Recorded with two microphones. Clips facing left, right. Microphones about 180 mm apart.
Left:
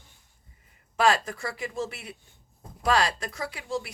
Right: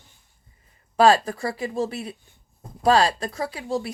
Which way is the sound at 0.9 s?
35° right (ahead or behind).